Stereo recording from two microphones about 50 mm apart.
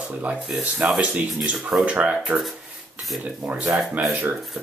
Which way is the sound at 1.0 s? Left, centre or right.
Right.